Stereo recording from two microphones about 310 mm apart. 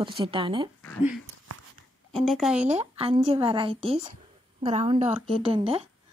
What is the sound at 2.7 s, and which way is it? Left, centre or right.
Speech, centre.